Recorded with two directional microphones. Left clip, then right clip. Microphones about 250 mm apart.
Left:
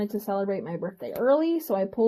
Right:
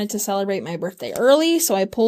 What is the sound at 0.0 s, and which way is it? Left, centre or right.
Speech, right.